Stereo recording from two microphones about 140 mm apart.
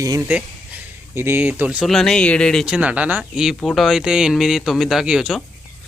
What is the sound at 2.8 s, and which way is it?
Speech, 10° right (ahead or behind).